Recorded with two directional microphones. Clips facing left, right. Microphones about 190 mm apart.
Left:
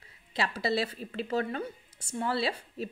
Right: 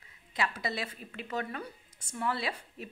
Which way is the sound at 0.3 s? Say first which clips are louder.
Left 4 dB; 30° left (ahead or behind).